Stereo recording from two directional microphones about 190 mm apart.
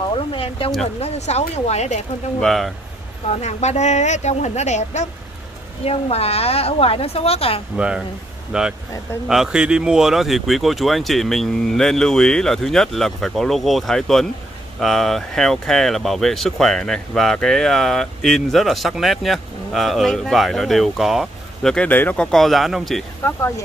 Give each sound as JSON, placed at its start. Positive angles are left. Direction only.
{"t": 0.1, "sound": "a sound", "side_deg": 30}
{"t": 0.9, "sound": "speech", "side_deg": 35}
{"t": 2.4, "sound": "speech", "side_deg": 0}
{"t": 3.3, "sound": "speech", "side_deg": 35}
{"t": 7.7, "sound": "speech", "side_deg": -5}